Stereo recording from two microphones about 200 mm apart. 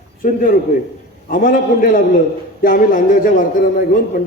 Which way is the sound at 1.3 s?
45° left (ahead or behind).